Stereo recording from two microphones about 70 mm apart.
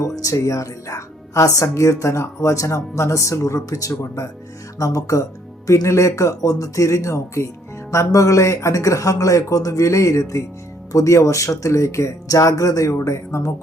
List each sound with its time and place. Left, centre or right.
0.2 s speech: left